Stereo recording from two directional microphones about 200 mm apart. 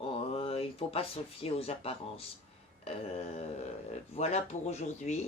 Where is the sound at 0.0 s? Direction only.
30° left (ahead or behind).